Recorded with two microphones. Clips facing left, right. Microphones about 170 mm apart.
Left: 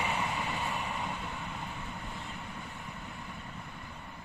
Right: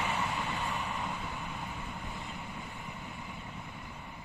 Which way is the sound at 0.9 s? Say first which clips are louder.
Even; centre (ahead or behind).